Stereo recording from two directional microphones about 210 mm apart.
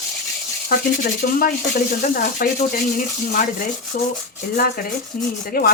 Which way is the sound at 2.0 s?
40° left (ahead or behind).